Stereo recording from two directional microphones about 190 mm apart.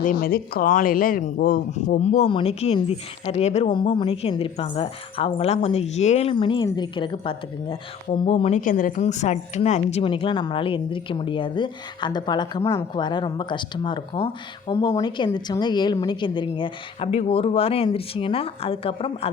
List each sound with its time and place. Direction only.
0.0 s speech: 50° left (ahead or behind); by 8.6 s 35° left (ahead or behind)
8.6 s a woman's voice: 45° left (ahead or behind); by 19.3 s 30° left (ahead or behind)